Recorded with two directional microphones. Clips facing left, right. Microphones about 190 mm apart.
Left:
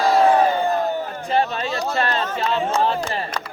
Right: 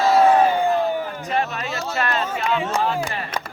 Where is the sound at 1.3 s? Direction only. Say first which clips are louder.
Left 4 dB; 30° left (ahead or behind).